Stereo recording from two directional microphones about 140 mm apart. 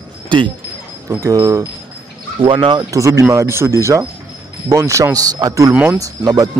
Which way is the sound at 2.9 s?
20° right (ahead or behind).